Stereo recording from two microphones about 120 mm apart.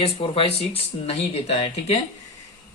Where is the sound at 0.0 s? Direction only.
50° left (ahead or behind).